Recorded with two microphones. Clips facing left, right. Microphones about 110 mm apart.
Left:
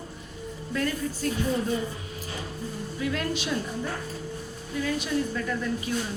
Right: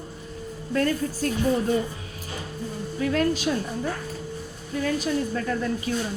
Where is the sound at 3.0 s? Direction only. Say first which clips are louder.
Right 6 dB; 40° right (ahead or behind).